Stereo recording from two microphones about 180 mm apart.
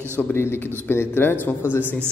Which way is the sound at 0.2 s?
10° left (ahead or behind).